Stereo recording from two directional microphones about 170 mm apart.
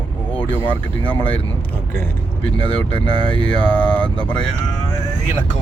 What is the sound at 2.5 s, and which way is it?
Speech, 30° right (ahead or behind).